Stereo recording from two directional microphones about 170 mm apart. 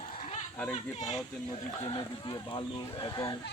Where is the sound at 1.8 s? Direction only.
25° left (ahead or behind).